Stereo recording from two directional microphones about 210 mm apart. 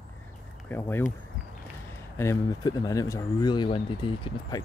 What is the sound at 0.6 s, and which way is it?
Speech, 10° left (ahead or behind).